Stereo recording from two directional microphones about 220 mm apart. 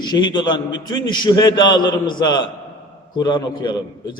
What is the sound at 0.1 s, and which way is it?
A man's voice, 20° left (ahead or behind).